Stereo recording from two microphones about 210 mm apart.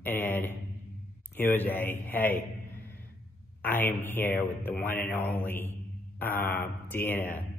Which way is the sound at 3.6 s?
10° left (ahead or behind).